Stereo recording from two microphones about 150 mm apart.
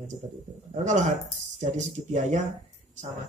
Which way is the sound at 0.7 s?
55° right (ahead or behind).